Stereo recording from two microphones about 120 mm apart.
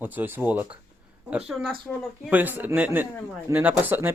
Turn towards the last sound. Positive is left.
turn(degrees=-15)  # may be behind; listen again after turning